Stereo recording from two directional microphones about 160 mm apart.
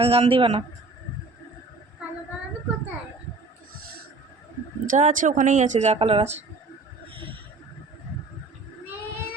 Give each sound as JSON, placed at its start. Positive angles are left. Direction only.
{"t": 0.0, "sound": "a man's voice", "side_deg": -35}
{"t": 4.9, "sound": "speech", "side_deg": -50}